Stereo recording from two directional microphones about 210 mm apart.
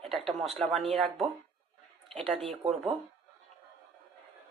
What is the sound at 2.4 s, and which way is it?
Speech, 30° right (ahead or behind).